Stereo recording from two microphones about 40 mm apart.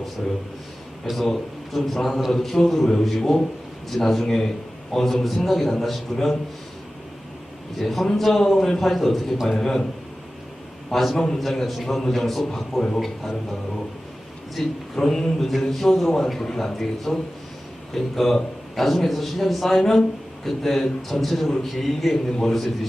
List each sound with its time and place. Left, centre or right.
0.2 s a man's voice: centre
1.0 s a man's voice: centre
7.8 s a man's voice: centre
10.9 s a man's voice: centre
12.5 s a man's voice: centre
14.6 s a man's voice: centre
16.0 s a man's voice: centre
22.3 s a man's voice: centre
22.5 s a man's voice: centre